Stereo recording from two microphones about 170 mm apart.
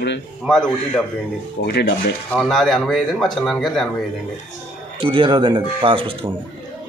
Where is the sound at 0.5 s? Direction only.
5° left (ahead or behind).